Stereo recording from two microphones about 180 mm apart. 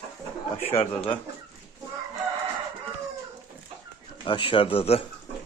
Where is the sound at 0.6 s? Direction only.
35° left (ahead or behind).